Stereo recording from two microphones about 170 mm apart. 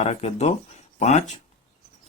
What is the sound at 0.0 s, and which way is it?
Speech, 40° left (ahead or behind).